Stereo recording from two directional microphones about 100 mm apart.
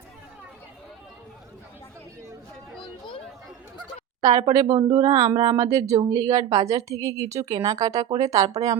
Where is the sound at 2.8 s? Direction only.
55° left (ahead or behind).